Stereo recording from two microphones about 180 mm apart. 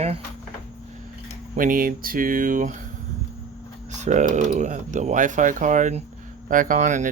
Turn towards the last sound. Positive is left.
turn(degrees=-45)  # may be behind; listen again after turning